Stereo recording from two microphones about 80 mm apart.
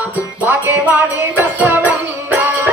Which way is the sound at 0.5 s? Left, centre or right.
Right.